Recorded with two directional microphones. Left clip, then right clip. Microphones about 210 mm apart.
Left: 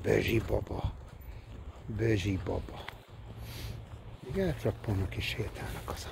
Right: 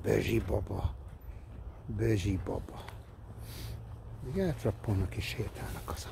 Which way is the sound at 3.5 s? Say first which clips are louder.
Left 2 dB; 25° right (ahead or behind).